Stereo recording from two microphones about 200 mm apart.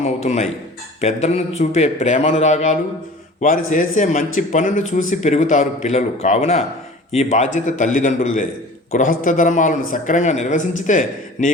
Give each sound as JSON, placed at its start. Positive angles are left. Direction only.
{"t": 0.0, "sound": "speech", "side_deg": 35}